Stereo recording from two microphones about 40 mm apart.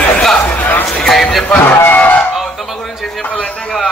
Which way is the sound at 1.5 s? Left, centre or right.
Left.